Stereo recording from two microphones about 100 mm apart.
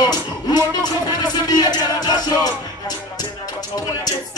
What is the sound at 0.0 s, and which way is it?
Music, 40° left (ahead or behind).